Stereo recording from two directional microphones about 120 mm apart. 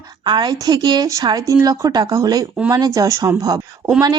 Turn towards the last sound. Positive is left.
turn(degrees=-30)  # may be behind; listen again after turning